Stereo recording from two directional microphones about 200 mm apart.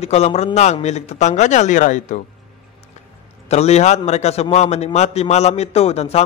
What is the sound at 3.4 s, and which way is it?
A man's voice, 35° left (ahead or behind).